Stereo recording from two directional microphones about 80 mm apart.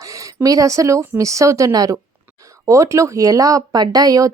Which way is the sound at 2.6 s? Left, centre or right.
Right.